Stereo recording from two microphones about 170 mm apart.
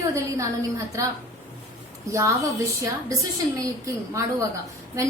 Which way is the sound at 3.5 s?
20° right (ahead or behind).